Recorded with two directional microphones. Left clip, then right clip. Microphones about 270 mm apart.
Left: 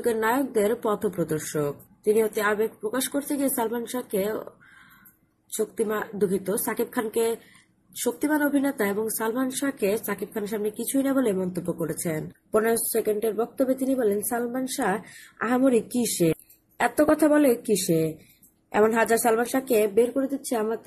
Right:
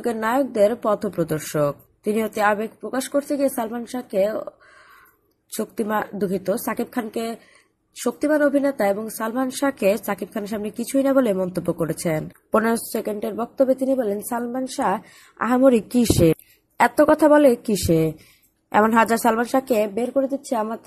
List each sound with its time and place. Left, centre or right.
0.0 s speech: centre
5.5 s a woman's voice: centre